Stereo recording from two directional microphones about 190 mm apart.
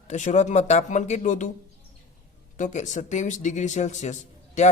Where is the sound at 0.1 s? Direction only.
40° left (ahead or behind).